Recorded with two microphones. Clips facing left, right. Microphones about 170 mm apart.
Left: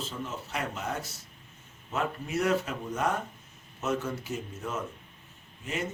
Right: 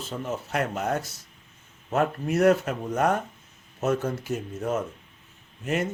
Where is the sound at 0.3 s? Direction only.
55° right (ahead or behind).